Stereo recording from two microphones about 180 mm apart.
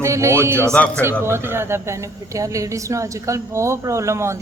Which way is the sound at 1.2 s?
15° right (ahead or behind).